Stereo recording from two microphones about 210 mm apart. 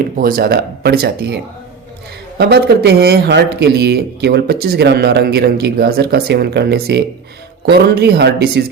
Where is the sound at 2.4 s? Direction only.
50° right (ahead or behind).